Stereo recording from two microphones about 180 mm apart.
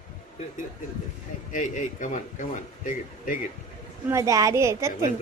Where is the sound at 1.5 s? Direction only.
45° left (ahead or behind).